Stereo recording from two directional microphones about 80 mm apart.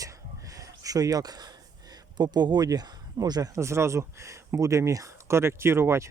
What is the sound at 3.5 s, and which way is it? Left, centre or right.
Speech, right.